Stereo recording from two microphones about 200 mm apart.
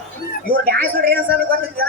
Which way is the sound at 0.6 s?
50° right (ahead or behind).